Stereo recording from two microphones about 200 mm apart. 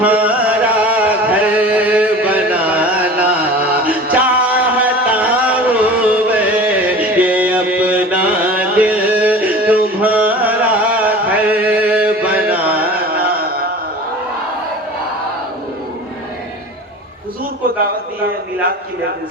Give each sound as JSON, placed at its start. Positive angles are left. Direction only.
{"t": 0.0, "sound": "a sound", "side_deg": -5}
{"t": 3.6, "sound": "music", "side_deg": -5}
{"t": 12.9, "sound": "carnatic music", "side_deg": -50}